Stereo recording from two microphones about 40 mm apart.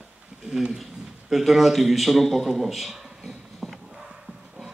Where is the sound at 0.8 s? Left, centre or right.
Centre.